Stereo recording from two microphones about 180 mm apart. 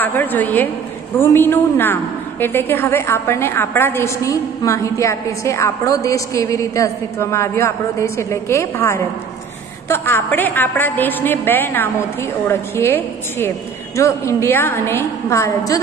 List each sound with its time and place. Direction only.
0.0 s a woman's voice: 10° left (ahead or behind)